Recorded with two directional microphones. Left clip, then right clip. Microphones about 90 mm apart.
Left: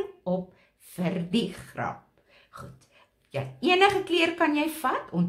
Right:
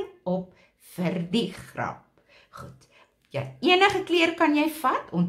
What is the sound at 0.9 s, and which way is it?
A woman's voice, 20° right (ahead or behind).